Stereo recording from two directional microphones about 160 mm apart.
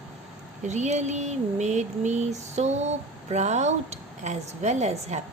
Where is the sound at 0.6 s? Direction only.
45° right (ahead or behind).